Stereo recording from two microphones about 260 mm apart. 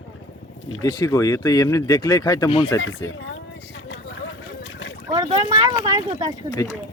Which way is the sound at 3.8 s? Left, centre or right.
Left.